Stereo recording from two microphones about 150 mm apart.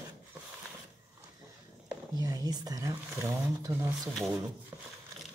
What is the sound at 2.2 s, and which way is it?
Speech, 25° right (ahead or behind).